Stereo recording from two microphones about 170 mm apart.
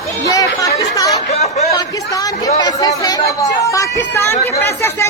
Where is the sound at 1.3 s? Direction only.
40° left (ahead or behind).